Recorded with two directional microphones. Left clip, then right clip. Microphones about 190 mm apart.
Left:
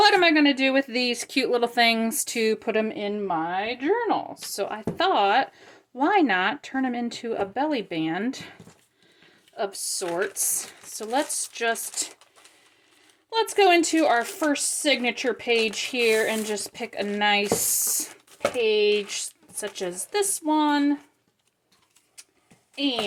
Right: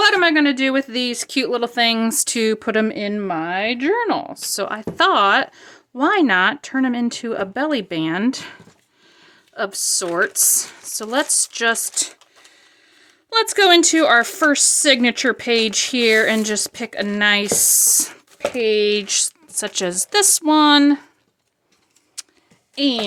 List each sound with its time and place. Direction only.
0.0 s speech: 15° right (ahead or behind)
9.6 s a woman's voice: 35° right (ahead or behind)
13.3 s a woman's voice: 30° right (ahead or behind); by 21.0 s 50° right (ahead or behind)
22.2 s a sound: 45° right (ahead or behind)
22.7 s a woman's voice: 45° right (ahead or behind)